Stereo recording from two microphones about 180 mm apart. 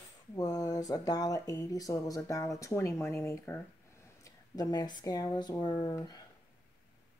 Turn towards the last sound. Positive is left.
turn(degrees=25)  # may be behind; listen again after turning